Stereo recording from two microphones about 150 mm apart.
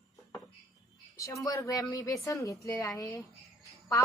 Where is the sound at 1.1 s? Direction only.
20° left (ahead or behind).